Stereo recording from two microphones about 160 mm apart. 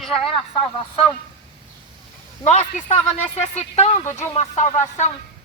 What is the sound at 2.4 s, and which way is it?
Speech, 45° left (ahead or behind).